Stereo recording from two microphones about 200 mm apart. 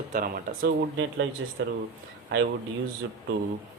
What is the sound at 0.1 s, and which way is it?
Speech, 45° right (ahead or behind).